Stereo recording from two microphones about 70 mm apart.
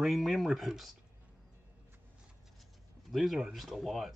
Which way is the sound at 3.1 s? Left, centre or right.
Centre.